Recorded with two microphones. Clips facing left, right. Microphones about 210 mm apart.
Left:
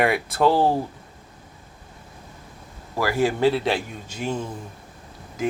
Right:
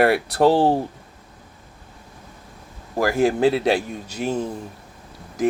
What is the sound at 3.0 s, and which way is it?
Speech, 50° right (ahead or behind).